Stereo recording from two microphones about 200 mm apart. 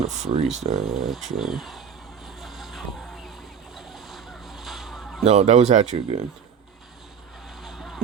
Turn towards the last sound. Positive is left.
turn(degrees=0)  # may be behind; listen again after turning